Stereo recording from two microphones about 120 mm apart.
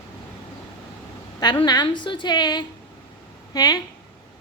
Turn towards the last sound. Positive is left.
turn(degrees=35)  # may be behind; listen again after turning